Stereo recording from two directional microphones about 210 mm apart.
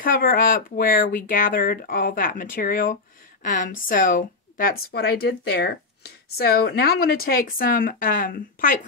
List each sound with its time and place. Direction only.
0.0 s a woman's voice: 45° left (ahead or behind)